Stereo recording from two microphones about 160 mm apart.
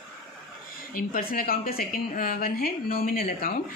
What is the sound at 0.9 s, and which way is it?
A woman's voice, 65° left (ahead or behind).